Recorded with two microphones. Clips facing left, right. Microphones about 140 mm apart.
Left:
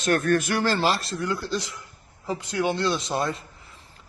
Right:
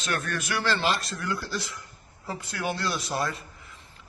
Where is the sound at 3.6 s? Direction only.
35° left (ahead or behind).